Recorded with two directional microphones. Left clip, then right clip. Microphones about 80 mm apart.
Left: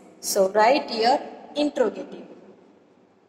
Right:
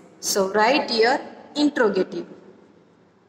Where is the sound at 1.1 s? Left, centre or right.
Left.